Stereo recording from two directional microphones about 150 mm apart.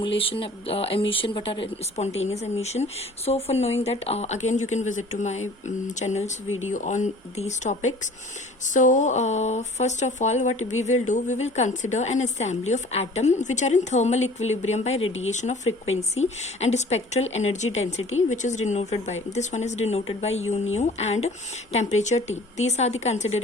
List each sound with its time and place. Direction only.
0.0 s speech: 35° left (ahead or behind)